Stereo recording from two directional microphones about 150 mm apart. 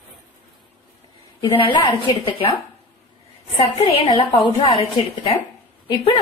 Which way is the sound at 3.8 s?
40° left (ahead or behind).